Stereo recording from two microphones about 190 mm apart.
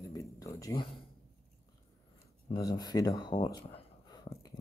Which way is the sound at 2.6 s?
20° left (ahead or behind).